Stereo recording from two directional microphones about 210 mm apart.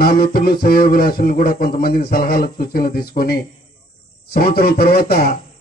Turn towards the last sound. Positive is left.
turn(degrees=45)  # may be behind; listen again after turning